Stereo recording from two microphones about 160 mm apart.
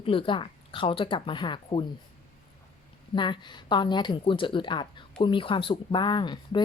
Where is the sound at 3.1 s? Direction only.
30° left (ahead or behind).